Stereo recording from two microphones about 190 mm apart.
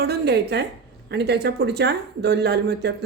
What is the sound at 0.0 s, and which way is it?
A woman's voice, 60° right (ahead or behind).